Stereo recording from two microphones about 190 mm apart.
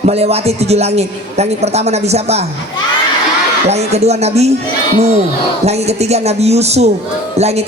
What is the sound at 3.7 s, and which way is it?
Speech, 35° right (ahead or behind).